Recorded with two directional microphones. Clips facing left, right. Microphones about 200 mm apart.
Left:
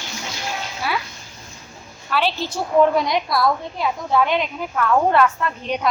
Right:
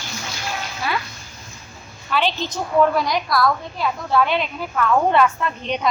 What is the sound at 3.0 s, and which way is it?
A woman's voice, 25° left (ahead or behind).